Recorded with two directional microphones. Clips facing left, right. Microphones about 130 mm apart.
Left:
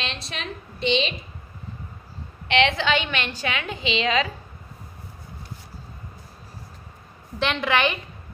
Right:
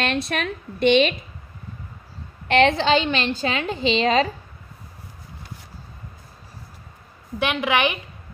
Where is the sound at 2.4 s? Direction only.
40° right (ahead or behind).